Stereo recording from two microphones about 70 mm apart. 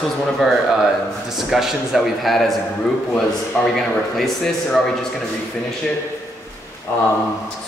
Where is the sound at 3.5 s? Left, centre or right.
Left.